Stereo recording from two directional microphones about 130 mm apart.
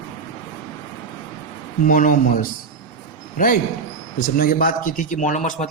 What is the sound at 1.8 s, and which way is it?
Speech, 90° left.